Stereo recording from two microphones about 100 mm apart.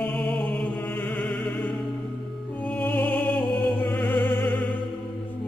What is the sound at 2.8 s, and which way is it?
Opera, 20° left (ahead or behind).